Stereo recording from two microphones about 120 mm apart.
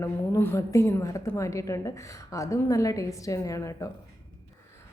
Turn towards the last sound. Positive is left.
turn(degrees=25)  # may be behind; listen again after turning